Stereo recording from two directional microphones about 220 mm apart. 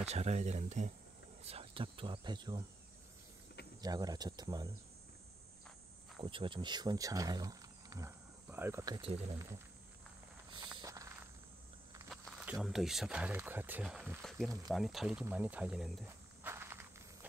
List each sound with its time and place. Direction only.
0.0 s speech: 30° right (ahead or behind)
3.8 s speech: 15° right (ahead or behind)
6.2 s speech: 20° right (ahead or behind)
10.5 s a sound: 20° right (ahead or behind)
12.1 s walk: centre (ahead or behind)
12.6 s speech: centre (ahead or behind)
16.5 s walk: 10° right (ahead or behind)